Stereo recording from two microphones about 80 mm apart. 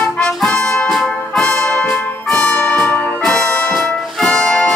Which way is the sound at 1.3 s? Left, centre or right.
Centre.